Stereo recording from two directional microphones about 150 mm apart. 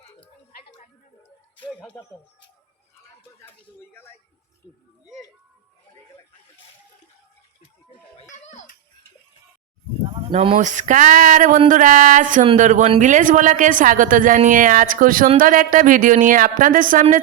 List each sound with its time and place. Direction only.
0.0 s a sound: 40° left (ahead or behind)
1.8 s speech: 15° left (ahead or behind)
3.9 s speech: 15° left (ahead or behind)
8.3 s a child's voice: 55° left (ahead or behind)
10.1 s a woman's voice: 35° right (ahead or behind); by 17.2 s 60° right (ahead or behind)